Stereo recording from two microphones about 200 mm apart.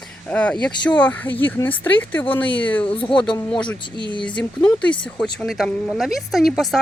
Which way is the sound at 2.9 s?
25° left (ahead or behind).